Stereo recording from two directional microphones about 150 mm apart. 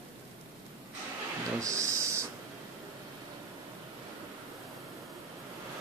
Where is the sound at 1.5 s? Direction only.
20° right (ahead or behind).